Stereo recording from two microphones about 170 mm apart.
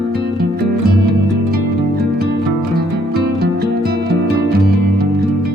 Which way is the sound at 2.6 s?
65° right (ahead or behind).